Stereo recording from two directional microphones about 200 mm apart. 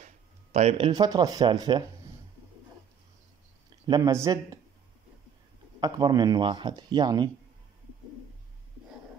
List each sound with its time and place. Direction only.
0.0 s speech: 35° right (ahead or behind); by 1.9 s 20° right (ahead or behind)
3.8 s speech: 20° right (ahead or behind)
5.8 s speech: 20° right (ahead or behind)